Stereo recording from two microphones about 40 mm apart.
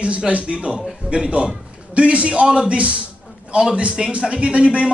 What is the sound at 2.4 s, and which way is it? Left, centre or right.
Speech, centre.